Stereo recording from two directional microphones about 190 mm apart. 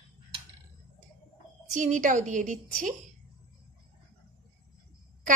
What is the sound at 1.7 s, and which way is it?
A woman's voice, 40° right (ahead or behind).